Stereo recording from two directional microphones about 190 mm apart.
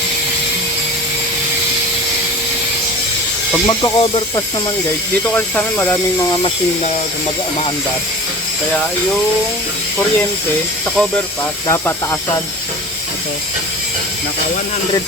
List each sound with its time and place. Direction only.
3.7 s speech: 15° left (ahead or behind)
4.0 s speech: 25° left (ahead or behind)
5.3 s speech: 10° left (ahead or behind)